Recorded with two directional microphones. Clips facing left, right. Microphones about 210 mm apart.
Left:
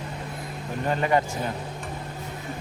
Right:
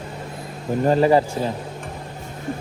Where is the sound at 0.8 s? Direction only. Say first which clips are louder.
Right 7 dB; 35° right (ahead or behind).